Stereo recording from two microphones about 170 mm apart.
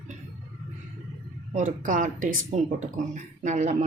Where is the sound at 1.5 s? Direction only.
50° right (ahead or behind).